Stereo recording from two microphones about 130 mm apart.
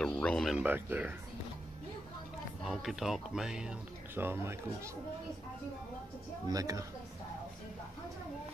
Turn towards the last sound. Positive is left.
turn(degrees=-25)  # may be behind; listen again after turning